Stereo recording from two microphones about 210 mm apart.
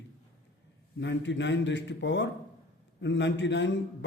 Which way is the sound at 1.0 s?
55° left (ahead or behind).